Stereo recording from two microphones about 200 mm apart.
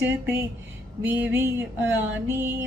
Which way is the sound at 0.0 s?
10° right (ahead or behind).